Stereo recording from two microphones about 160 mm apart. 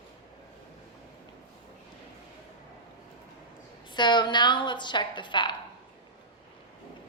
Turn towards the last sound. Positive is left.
turn(degrees=30)  # may be behind; listen again after turning